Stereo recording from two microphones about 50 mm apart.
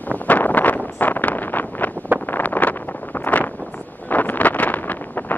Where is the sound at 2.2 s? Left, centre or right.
Left.